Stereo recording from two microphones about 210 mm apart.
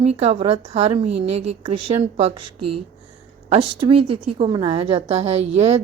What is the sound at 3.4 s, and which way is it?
A woman's voice, 25° right (ahead or behind).